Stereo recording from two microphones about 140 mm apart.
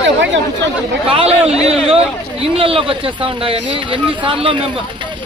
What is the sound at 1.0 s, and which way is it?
Speech, 45° right (ahead or behind).